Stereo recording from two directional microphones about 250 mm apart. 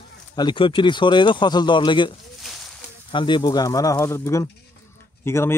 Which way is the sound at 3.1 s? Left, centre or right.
Centre.